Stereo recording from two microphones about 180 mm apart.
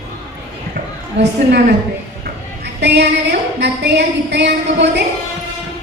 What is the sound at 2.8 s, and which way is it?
A woman's voice, 70° right (ahead or behind).